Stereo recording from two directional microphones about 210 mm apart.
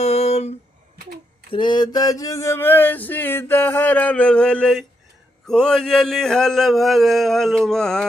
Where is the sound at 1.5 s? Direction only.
25° left (ahead or behind); by 4.9 s 5° left (ahead or behind).